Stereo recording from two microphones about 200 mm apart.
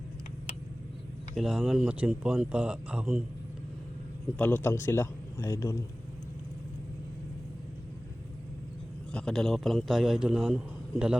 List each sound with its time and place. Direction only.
1.4 s a man's voice: centre (ahead or behind)
4.4 s a man's voice: 10° left (ahead or behind)
9.1 s a man's voice: 5° left (ahead or behind)